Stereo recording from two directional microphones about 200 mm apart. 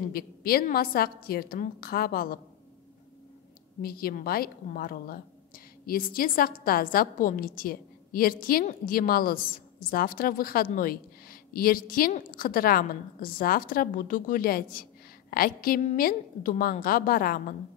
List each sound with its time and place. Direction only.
0.1 s a woman's voice: 50° left (ahead or behind)
3.8 s a woman's voice: 50° left (ahead or behind)